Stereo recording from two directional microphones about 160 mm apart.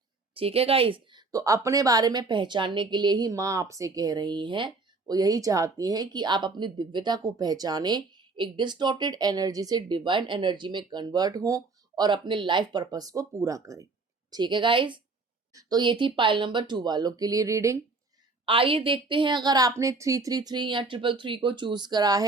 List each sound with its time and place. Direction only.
0.3 s speech: 40° right (ahead or behind)
1.3 s a woman's voice: 20° right (ahead or behind)
18.4 s a woman's voice: 35° right (ahead or behind)